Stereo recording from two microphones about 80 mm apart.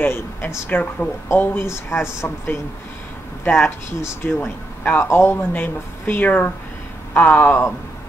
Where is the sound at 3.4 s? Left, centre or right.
Left.